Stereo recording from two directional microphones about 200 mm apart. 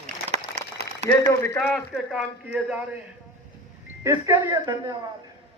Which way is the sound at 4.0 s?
20° right (ahead or behind).